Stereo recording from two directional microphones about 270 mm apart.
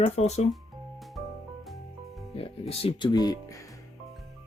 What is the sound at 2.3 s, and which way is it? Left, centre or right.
Speech, left.